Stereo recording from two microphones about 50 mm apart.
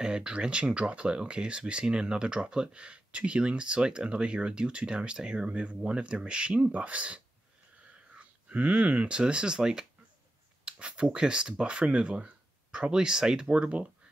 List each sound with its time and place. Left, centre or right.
0.0 s speech: centre
8.2 s speech: right
10.6 s a sound: centre
11.1 s speech: centre
12.9 s speech: centre